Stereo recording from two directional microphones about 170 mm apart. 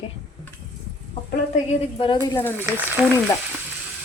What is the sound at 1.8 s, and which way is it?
Speech, 30° left (ahead or behind).